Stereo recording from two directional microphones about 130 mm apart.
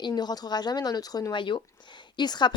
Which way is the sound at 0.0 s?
30° left (ahead or behind).